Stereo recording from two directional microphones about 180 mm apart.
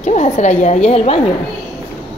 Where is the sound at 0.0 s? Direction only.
40° left (ahead or behind).